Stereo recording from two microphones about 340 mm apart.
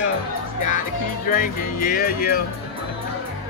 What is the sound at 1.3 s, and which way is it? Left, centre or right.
Speech, left.